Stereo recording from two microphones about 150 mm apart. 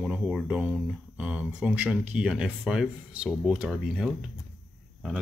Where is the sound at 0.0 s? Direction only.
5° right (ahead or behind).